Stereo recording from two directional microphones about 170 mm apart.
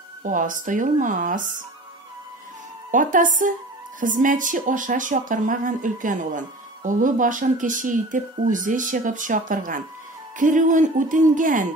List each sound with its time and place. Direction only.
0.2 s speech: 50° right (ahead or behind)
2.9 s speech: 50° right (ahead or behind)